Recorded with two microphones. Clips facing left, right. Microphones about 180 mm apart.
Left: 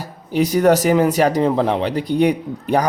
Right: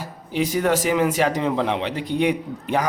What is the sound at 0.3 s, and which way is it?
Speech, 40° left (ahead or behind).